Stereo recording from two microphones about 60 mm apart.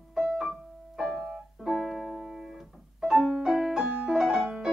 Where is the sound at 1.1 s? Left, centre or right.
Centre.